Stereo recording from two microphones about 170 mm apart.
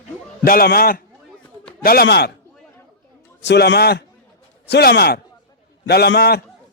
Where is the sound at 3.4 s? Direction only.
85° left; by 6.4 s 70° left (ahead or behind).